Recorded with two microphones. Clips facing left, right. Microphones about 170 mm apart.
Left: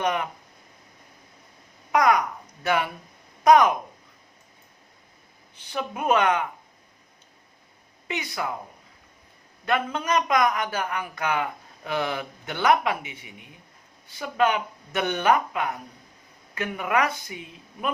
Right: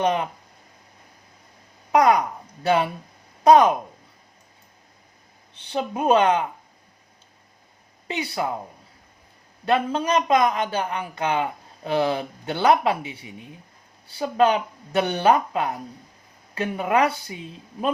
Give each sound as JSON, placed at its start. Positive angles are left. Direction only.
{"t": 0.0, "sound": "a man's voice", "side_deg": -30}
{"t": 1.9, "sound": "a man's voice", "side_deg": -30}
{"t": 5.5, "sound": "a man's voice", "side_deg": -30}
{"t": 8.0, "sound": "speech", "side_deg": -30}
{"t": 9.6, "sound": "a man's voice", "side_deg": -30}